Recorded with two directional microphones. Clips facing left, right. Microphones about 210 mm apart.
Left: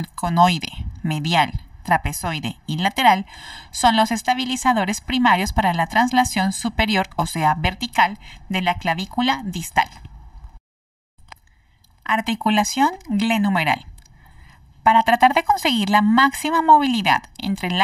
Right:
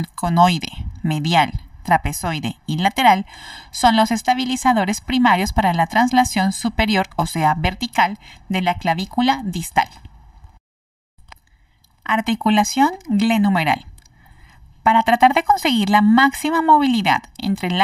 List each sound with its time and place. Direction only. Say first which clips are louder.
0.0 s speech: right 2 dB; 45° right (ahead or behind)
12.0 s speech: right 3 dB; 45° right (ahead or behind)